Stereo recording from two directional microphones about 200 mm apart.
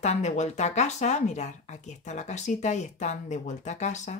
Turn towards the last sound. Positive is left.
turn(degrees=35)  # may be behind; listen again after turning